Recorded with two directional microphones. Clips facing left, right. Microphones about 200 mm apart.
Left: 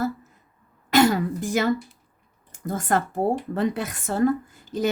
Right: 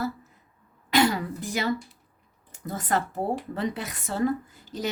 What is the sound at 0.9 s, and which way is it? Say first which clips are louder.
A woman's voice: left 4 dB; 45° left (ahead or behind).